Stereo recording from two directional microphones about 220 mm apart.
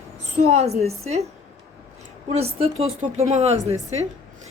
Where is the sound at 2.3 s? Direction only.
30° right (ahead or behind).